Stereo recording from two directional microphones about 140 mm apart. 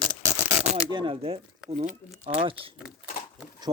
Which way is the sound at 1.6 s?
60° right (ahead or behind).